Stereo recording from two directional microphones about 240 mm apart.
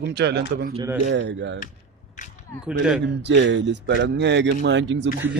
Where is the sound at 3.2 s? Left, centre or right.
Right.